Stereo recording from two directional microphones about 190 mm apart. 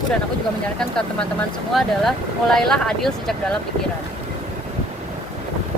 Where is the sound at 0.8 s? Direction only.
5° left (ahead or behind).